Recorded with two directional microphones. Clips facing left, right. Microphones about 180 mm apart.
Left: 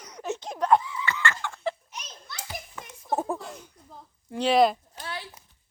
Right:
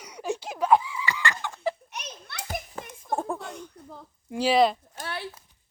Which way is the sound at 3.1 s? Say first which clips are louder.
Left 1 dB; 5° left (ahead or behind).